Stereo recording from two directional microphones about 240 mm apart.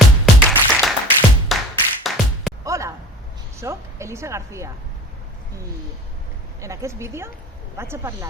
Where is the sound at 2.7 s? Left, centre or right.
Centre.